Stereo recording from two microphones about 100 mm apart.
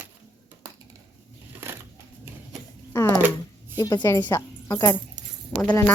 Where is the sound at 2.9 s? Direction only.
30° left (ahead or behind).